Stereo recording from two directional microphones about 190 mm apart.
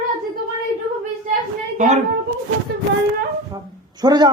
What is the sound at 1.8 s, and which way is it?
Speech, 40° right (ahead or behind).